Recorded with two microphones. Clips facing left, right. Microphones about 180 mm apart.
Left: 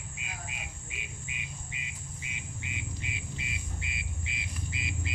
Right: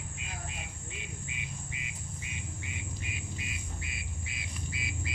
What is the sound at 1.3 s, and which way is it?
Insect, 20° left (ahead or behind).